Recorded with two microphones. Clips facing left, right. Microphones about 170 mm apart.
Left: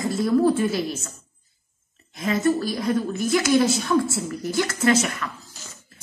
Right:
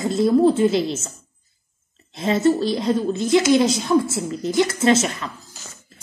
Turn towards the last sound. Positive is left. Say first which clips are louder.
# right 3 dB
turn(degrees=-25)  # may be behind; listen again after turning